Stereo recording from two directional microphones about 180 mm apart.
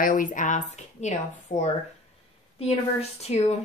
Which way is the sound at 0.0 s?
50° left (ahead or behind).